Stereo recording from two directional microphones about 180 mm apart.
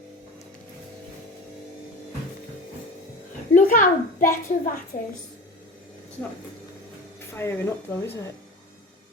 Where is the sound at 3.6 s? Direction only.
50° left (ahead or behind).